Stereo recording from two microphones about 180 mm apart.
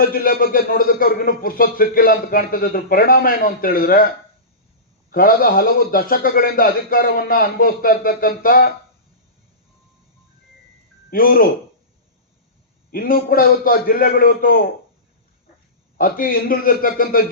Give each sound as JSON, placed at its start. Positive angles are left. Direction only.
{"t": 0.0, "sound": "speech", "side_deg": 55}
{"t": 5.1, "sound": "speech", "side_deg": 55}
{"t": 11.1, "sound": "speech", "side_deg": 55}
{"t": 12.9, "sound": "speech", "side_deg": 55}
{"t": 16.0, "sound": "speech", "side_deg": 50}